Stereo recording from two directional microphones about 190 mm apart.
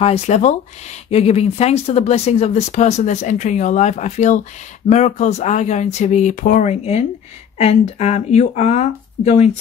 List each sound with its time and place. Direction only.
0.0 s speech: 35° left (ahead or behind)